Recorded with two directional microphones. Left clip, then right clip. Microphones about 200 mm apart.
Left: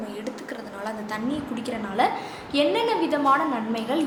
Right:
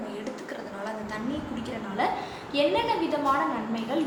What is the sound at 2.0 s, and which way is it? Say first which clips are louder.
Speech: left 4 dB; 50° left (ahead or behind).